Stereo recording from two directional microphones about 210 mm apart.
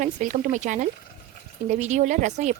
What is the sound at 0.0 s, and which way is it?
Speech, 35° right (ahead or behind).